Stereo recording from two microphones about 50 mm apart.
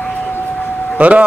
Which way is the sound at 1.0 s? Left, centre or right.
Right.